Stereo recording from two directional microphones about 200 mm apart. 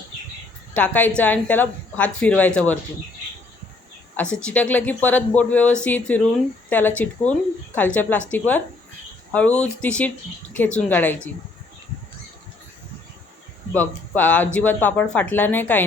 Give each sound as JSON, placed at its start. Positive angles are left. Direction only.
{"t": 0.8, "sound": "speech", "side_deg": 10}
{"t": 4.2, "sound": "speech", "side_deg": 5}
{"t": 13.7, "sound": "speech", "side_deg": 10}